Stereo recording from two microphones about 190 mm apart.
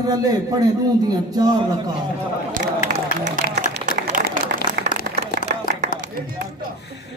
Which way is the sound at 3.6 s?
45° right (ahead or behind).